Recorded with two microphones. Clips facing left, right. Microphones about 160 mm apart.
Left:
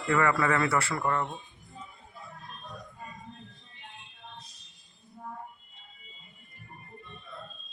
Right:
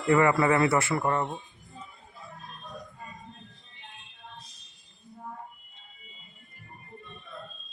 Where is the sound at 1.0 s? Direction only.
25° right (ahead or behind).